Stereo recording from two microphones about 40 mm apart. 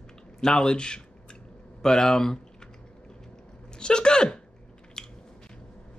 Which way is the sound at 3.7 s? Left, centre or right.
Left.